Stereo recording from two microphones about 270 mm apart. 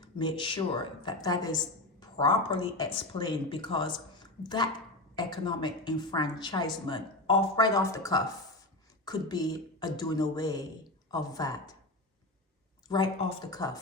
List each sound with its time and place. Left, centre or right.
0.0 s a woman's voice: centre
12.9 s a woman's voice: centre